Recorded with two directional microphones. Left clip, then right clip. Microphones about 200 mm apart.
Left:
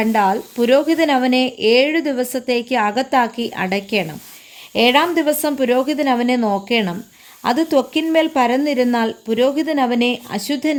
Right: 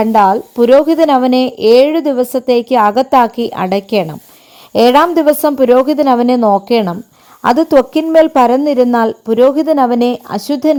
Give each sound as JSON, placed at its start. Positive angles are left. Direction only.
{"t": 0.0, "sound": "speech", "side_deg": -35}